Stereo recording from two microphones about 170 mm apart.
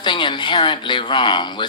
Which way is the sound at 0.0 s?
25° left (ahead or behind).